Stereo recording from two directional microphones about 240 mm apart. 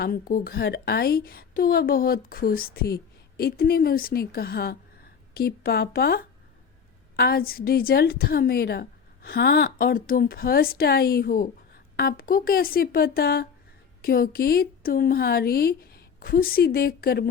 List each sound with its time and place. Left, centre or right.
0.0 s a woman's voice: left